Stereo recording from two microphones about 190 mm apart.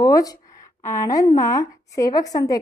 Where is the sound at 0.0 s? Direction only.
20° left (ahead or behind).